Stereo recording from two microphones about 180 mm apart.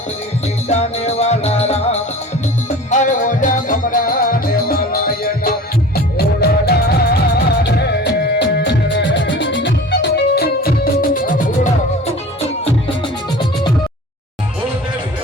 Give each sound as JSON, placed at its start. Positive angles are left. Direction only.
{"t": 0.7, "sound": "music", "side_deg": 35}